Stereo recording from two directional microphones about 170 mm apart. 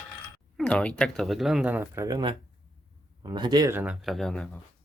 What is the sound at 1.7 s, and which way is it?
Speech, 15° right (ahead or behind).